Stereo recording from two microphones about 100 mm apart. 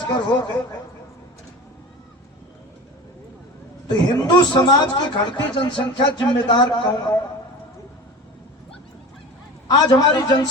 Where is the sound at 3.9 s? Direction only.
40° left (ahead or behind).